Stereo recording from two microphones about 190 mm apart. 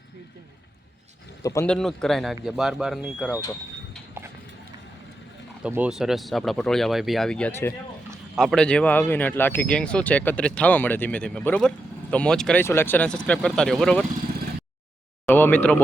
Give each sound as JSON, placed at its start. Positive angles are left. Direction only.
{"t": 1.4, "sound": "speech", "side_deg": 15}
{"t": 1.6, "sound": "speech", "side_deg": 5}
{"t": 4.2, "sound": "clip-clop", "side_deg": -10}
{"t": 5.6, "sound": "speech", "side_deg": -5}
{"t": 15.3, "sound": "speech", "side_deg": 10}